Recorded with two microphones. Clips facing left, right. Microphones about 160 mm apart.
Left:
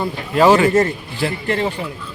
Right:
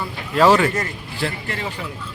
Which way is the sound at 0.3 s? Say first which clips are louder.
Left 3 dB; centre (ahead or behind).